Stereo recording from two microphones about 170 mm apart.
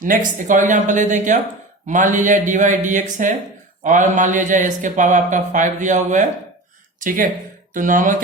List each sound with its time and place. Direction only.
0.0 s a man's voice: 50° right (ahead or behind)